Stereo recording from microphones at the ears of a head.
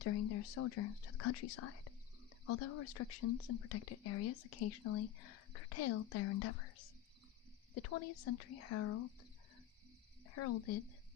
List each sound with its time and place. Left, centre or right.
0.0 s speech: left
10.2 s speech: left